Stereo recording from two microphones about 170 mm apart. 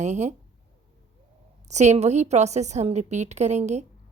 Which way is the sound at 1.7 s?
45° right (ahead or behind).